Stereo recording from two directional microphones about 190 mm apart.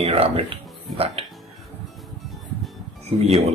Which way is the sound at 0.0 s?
30° right (ahead or behind).